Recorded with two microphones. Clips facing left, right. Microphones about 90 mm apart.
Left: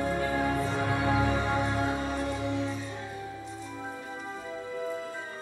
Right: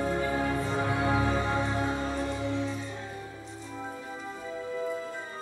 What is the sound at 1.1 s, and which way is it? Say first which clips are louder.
Music: even; 20° right (ahead or behind).